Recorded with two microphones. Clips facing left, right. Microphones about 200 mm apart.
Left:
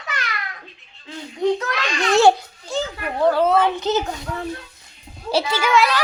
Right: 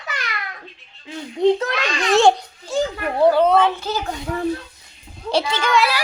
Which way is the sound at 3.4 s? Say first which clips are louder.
Right 2 dB; 5° left (ahead or behind).